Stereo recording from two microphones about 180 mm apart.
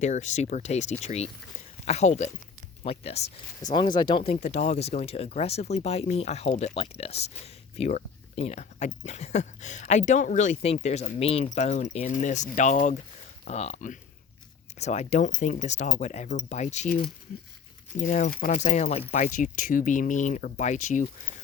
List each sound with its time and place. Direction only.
0.0 s speech: 40° left (ahead or behind)
3.6 s speech: 25° left (ahead or behind)
4.4 s speech: 40° left (ahead or behind)